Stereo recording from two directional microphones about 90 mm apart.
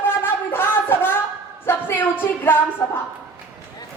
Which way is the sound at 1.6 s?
25° left (ahead or behind).